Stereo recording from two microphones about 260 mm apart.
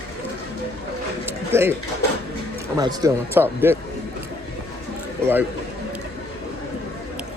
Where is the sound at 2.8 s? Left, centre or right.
Centre.